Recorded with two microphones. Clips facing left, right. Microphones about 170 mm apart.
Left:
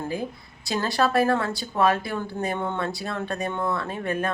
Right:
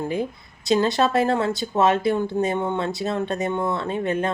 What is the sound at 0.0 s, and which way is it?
Speech, 20° right (ahead or behind).